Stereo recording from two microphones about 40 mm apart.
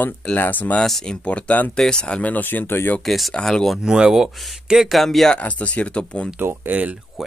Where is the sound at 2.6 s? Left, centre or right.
Left.